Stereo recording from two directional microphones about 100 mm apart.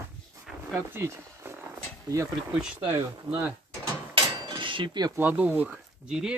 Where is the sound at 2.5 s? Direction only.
10° right (ahead or behind).